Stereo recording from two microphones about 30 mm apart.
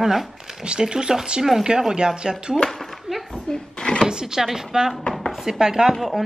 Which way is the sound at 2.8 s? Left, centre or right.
Centre.